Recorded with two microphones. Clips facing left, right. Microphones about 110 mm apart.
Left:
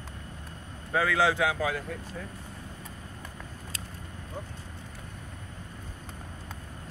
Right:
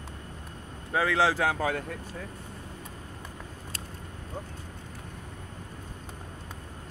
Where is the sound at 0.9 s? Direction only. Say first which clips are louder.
Even; 30° right (ahead or behind); by 1.8 s 45° right (ahead or behind).